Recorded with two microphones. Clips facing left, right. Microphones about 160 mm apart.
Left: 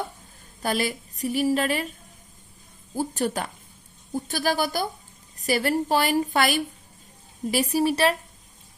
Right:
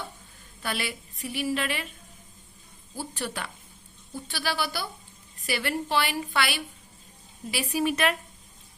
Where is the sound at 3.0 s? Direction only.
45° left (ahead or behind).